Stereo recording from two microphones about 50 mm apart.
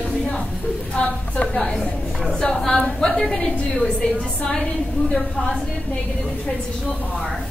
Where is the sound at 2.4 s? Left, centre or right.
Centre.